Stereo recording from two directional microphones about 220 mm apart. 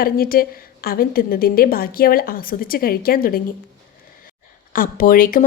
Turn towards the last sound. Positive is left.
turn(degrees=40)  # may be behind; listen again after turning